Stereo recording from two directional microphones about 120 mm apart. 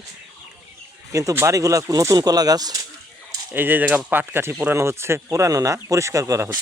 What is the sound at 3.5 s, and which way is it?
Speech, 15° right (ahead or behind).